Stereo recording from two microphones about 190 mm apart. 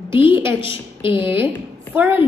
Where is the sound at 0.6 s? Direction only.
25° left (ahead or behind).